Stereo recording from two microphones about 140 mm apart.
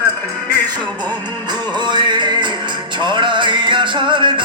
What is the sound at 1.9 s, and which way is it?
Music, 30° right (ahead or behind).